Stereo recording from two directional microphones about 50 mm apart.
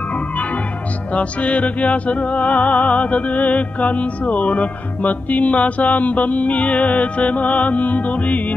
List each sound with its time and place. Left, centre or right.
1.1 s music: left